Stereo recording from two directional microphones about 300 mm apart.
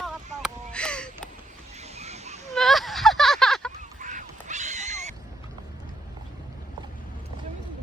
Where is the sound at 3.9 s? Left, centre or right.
Right.